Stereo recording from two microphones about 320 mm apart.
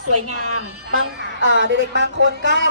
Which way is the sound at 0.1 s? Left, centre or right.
Right.